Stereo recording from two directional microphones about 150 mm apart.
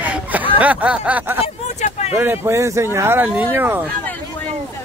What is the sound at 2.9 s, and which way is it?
Snicker, 15° right (ahead or behind).